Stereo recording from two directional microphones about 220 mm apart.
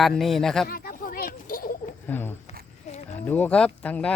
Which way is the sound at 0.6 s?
45° left (ahead or behind).